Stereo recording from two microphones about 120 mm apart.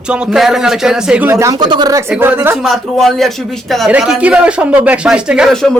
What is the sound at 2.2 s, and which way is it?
Speech, 15° right (ahead or behind).